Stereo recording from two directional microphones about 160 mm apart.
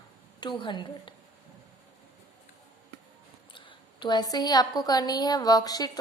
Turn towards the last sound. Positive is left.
turn(degrees=25)  # may be behind; listen again after turning